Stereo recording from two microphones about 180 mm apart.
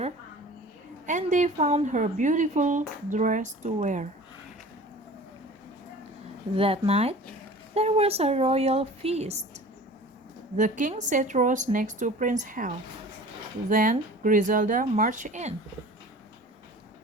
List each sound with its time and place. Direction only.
1.0 s a woman's voice: 40° right (ahead or behind)
6.5 s speech: 30° right (ahead or behind)
10.6 s a woman's voice: 45° right (ahead or behind)